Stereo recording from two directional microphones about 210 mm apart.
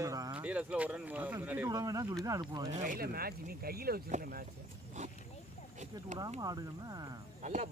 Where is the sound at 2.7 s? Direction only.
40° right (ahead or behind).